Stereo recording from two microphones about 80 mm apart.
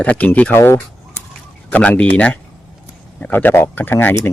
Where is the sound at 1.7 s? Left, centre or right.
Centre.